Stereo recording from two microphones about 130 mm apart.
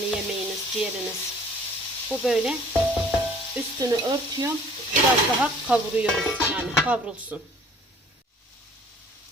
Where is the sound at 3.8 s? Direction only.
30° right (ahead or behind).